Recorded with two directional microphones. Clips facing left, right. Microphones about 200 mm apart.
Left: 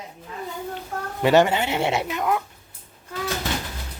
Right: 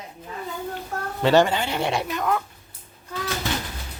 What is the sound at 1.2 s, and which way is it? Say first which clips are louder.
Speech: left 1 dB; 20° left (ahead or behind).